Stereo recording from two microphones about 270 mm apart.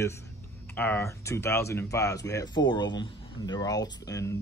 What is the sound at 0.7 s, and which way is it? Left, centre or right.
Speech, centre.